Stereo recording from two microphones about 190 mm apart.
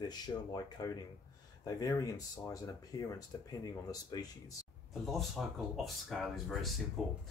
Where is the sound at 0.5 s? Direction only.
20° left (ahead or behind).